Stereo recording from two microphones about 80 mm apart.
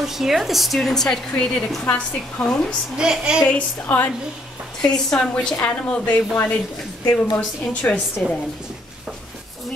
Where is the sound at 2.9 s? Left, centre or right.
Centre.